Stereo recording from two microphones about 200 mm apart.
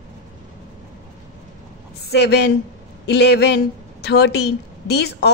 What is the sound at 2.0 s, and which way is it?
A woman's voice, 55° left (ahead or behind).